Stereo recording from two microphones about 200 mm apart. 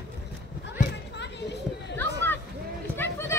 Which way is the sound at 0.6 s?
60° left (ahead or behind).